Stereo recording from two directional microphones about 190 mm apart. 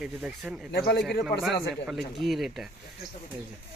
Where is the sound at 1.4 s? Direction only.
Centre (ahead or behind).